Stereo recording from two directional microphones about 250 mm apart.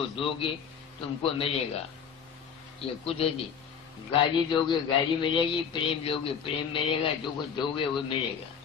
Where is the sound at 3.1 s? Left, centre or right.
Left.